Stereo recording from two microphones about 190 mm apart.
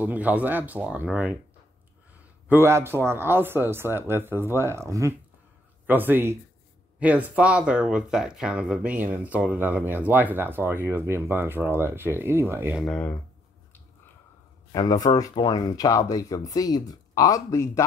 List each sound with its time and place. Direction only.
0.0 s speech: 10° right (ahead or behind)
2.4 s speech: 10° right (ahead or behind)
12.8 s speech: 10° left (ahead or behind)
14.7 s speech: 20° left (ahead or behind)